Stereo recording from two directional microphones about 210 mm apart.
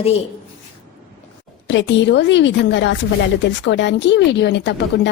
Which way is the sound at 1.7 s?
60° left (ahead or behind).